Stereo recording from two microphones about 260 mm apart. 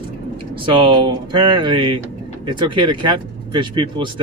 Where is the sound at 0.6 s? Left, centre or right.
Centre.